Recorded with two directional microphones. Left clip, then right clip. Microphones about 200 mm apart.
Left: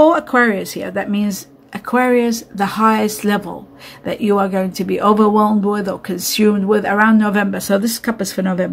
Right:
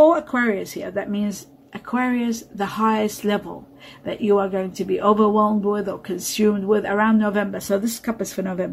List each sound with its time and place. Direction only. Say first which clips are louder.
0.0 s speech: left 4 dB; 25° left (ahead or behind)